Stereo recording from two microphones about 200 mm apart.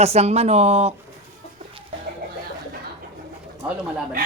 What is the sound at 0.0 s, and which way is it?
Speech, 30° right (ahead or behind).